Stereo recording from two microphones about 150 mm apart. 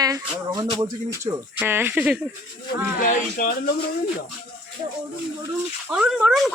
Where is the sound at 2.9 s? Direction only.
65° left (ahead or behind).